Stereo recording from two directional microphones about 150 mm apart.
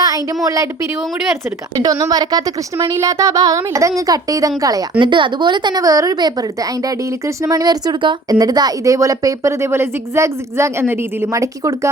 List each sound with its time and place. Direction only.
0.4 s speech: 20° right (ahead or behind)
1.7 s speech: 25° right (ahead or behind)